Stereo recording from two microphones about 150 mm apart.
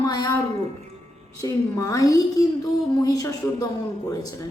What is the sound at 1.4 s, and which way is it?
A woman's voice, 20° left (ahead or behind).